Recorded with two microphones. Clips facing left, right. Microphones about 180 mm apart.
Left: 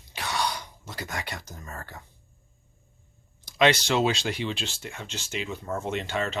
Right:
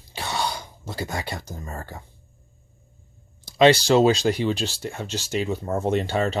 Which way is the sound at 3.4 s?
30° right (ahead or behind).